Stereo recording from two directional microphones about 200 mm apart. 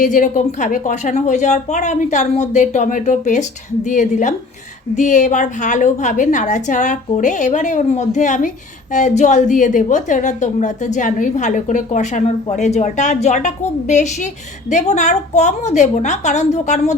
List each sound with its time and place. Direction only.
0.0 s a woman's voice: 40° left (ahead or behind)